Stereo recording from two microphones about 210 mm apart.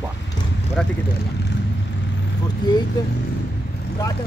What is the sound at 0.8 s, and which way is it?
Speech, 5° left (ahead or behind).